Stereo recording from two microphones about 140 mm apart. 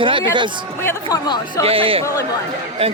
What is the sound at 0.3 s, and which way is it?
Speech, 35° right (ahead or behind).